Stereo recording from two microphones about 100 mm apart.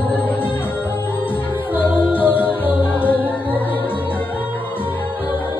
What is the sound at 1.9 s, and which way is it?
Music, 15° right (ahead or behind).